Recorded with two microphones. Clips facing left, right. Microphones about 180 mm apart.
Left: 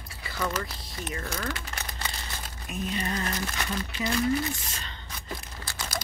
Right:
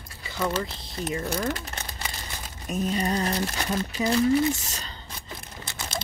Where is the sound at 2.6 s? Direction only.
40° right (ahead or behind).